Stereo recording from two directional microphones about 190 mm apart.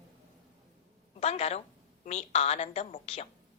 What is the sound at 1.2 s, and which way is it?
A woman's voice, 35° left (ahead or behind).